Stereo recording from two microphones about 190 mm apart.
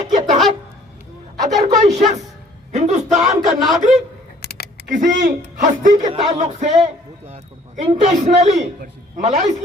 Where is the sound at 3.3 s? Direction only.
Centre (ahead or behind).